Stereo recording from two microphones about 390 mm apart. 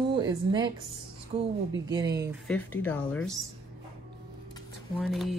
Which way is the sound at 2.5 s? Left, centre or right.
Centre.